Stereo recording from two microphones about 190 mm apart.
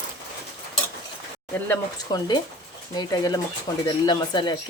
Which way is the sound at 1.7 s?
20° left (ahead or behind).